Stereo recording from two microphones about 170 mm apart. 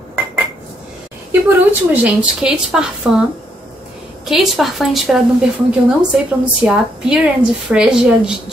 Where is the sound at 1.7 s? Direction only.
10° right (ahead or behind).